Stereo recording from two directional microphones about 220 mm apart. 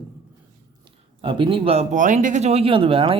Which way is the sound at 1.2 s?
20° right (ahead or behind).